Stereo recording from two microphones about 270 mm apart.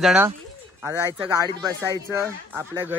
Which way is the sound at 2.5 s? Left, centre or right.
Centre.